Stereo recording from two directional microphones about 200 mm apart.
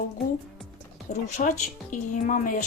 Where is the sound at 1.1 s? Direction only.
35° left (ahead or behind).